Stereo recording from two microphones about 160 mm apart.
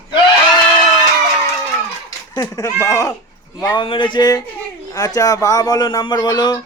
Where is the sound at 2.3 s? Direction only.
25° left (ahead or behind).